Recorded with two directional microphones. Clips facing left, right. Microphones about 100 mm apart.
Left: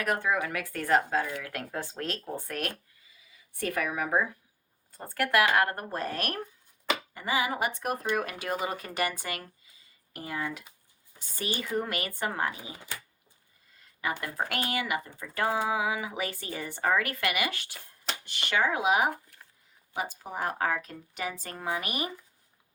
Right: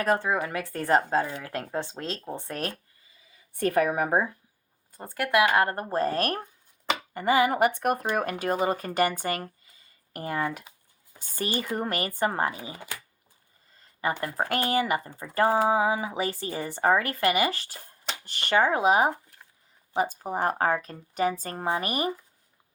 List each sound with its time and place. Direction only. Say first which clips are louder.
0.0 s speech: right 3 dB; 30° right (ahead or behind)
3.6 s speech: right 7 dB; 45° right (ahead or behind)
4.9 s speech: right 1 dB; 15° right (ahead or behind); by 6.4 s 40° right (ahead or behind)
7.1 s a woman's voice: right 10 dB; 50° right (ahead or behind)
14.0 s a woman's voice: right 4 dB; 35° right (ahead or behind)